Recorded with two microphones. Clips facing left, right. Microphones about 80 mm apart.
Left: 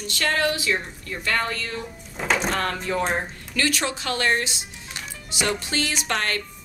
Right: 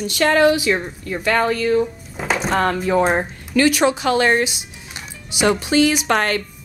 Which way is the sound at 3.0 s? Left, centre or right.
Right.